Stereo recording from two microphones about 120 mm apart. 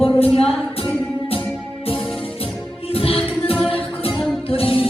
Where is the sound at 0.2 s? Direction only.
55° left (ahead or behind).